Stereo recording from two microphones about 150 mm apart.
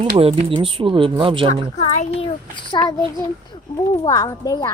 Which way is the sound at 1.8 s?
50° left (ahead or behind).